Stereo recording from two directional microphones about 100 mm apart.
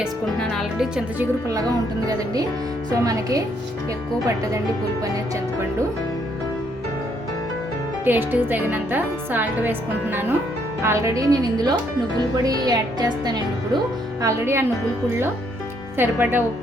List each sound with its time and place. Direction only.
2.9 s a woman's voice: 35° right (ahead or behind)
8.0 s a woman's voice: 20° right (ahead or behind); by 13.4 s 40° right (ahead or behind)
14.2 s a woman's voice: 30° right (ahead or behind)
16.0 s a woman's voice: 20° right (ahead or behind)